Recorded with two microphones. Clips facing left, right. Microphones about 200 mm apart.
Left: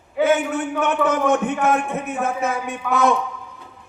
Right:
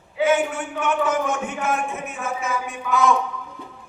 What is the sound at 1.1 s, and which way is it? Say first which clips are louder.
A man's voice: left 5 dB; 60° left (ahead or behind).